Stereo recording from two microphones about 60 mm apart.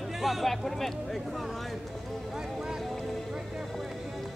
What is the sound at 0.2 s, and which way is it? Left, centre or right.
Speech, centre.